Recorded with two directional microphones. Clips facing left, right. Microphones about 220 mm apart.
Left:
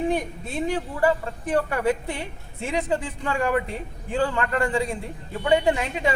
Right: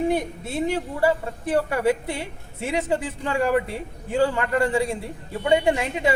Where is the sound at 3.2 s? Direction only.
25° right (ahead or behind).